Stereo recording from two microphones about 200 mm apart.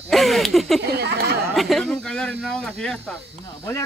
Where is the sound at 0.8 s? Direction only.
55° right (ahead or behind).